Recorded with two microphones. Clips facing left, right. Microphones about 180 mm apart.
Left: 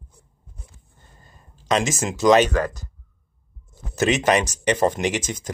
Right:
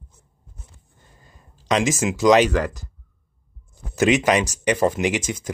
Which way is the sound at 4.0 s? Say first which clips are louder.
Right 1 dB; 15° right (ahead or behind).